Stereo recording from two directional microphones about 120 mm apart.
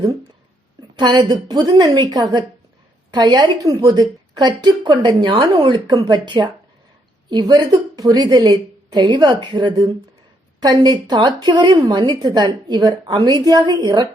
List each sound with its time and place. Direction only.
0.9 s a woman's voice: 40° right (ahead or behind)